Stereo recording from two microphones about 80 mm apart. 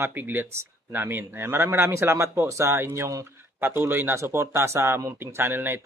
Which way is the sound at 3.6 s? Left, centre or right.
Right.